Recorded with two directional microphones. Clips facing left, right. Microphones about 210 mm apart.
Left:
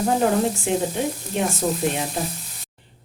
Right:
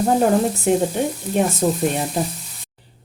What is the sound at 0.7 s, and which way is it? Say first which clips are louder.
Speech: right 9 dB; 45° right (ahead or behind).